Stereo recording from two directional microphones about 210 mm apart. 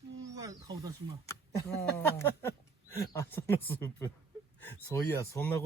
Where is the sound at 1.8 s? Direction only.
10° left (ahead or behind).